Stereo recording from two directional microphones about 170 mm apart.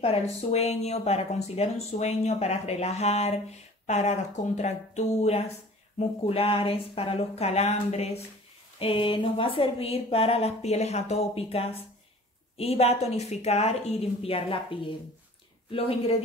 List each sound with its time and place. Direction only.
0.0 s speech: 35° left (ahead or behind)